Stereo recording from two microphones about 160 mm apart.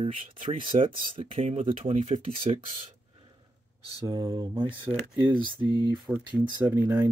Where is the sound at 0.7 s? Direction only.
35° right (ahead or behind).